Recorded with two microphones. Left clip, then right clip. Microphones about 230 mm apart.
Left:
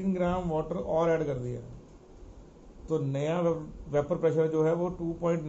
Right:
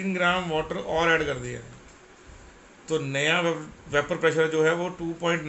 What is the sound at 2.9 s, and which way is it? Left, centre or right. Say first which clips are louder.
Speech: right 6 dB; right.